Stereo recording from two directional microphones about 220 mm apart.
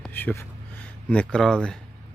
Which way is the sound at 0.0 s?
10° left (ahead or behind).